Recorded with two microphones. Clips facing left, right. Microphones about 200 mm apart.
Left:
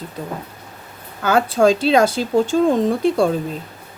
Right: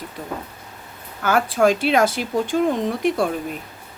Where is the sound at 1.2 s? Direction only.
25° left (ahead or behind).